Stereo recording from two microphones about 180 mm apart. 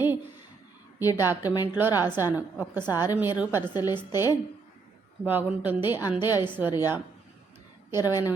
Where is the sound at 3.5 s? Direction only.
20° left (ahead or behind).